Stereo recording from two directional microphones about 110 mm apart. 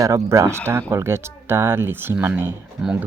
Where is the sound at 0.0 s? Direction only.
30° right (ahead or behind).